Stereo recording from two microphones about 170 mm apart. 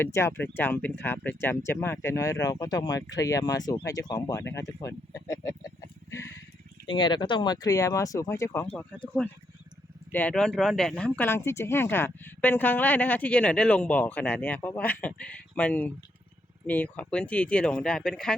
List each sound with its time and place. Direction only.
0.0 s speech: 15° left (ahead or behind)
8.7 s speech: 5° left (ahead or behind)